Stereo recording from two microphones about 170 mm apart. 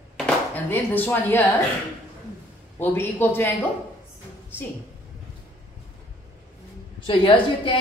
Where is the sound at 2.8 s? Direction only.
10° left (ahead or behind).